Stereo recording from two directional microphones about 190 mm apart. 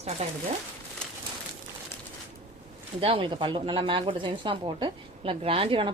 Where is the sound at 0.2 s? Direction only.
35° right (ahead or behind).